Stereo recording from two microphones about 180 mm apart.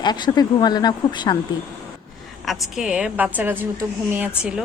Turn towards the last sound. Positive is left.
turn(degrees=-5)  # may be behind; listen again after turning